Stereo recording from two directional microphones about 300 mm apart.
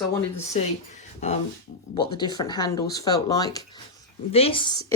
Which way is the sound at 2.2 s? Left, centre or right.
Centre.